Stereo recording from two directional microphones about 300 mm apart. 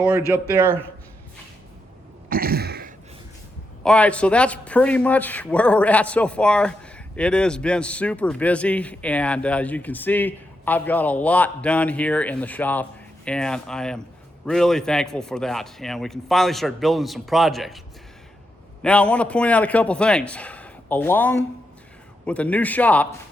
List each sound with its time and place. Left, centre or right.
0.3 s speech: centre
2.3 s throat clearing: right
3.8 s a man's voice: centre
18.8 s a man's voice: centre